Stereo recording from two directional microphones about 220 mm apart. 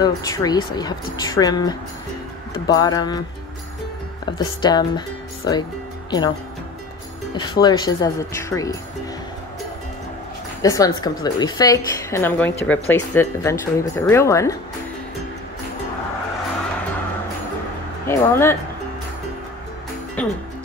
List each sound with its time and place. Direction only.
0.0 s a woman's voice: 15° left (ahead or behind)
4.3 s speech: 20° left (ahead or behind)
7.3 s a woman's voice: 20° left (ahead or behind)
10.6 s a woman's voice: 15° left (ahead or behind)
18.0 s a woman's voice: 10° left (ahead or behind)
20.2 s a woman's voice: 5° left (ahead or behind)